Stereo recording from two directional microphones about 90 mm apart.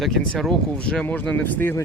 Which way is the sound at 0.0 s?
Centre (ahead or behind).